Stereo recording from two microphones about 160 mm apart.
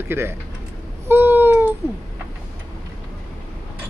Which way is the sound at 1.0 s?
15° right (ahead or behind).